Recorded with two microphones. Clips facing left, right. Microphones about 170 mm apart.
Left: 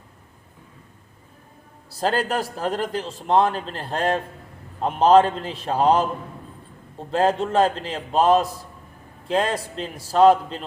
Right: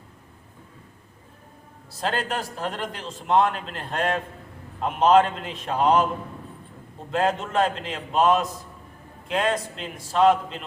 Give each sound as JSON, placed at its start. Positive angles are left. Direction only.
{"t": 1.9, "sound": "a man's voice", "side_deg": 40}
{"t": 7.1, "sound": "a man's voice", "side_deg": 35}